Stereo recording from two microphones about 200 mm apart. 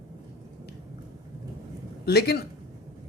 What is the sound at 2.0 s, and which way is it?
Speech, 55° left (ahead or behind).